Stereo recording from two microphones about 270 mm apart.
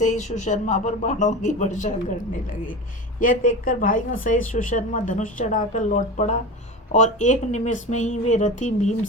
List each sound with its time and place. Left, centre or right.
0.0 s speech: left
3.2 s speech: left